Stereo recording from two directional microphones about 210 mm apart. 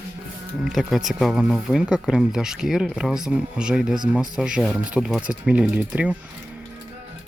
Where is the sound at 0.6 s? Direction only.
Centre (ahead or behind).